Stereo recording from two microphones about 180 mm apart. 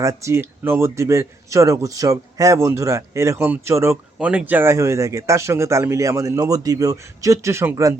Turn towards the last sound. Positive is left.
turn(degrees=-15)  # may be behind; listen again after turning